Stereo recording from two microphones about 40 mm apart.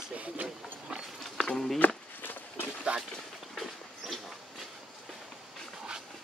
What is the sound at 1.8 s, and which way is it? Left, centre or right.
Walk, left.